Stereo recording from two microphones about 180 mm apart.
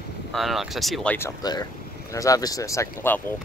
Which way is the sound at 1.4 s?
20° left (ahead or behind).